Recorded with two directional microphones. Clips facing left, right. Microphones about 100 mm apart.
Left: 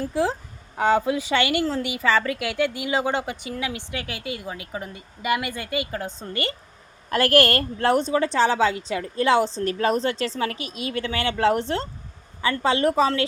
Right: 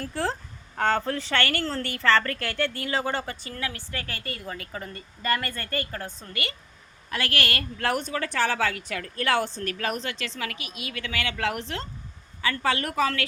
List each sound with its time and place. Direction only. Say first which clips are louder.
0.0 s a woman's voice: left 5 dB; 10° left (ahead or behind)
6.1 s a woman's voice: left 6 dB; 30° left (ahead or behind)